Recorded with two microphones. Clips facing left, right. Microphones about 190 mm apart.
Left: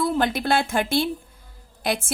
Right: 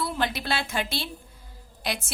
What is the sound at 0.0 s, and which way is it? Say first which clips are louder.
Speech: left 6 dB; 50° left (ahead or behind).